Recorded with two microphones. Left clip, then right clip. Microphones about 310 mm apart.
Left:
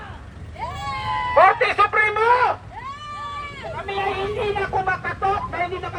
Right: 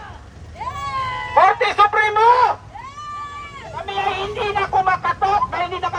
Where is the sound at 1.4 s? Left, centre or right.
Right.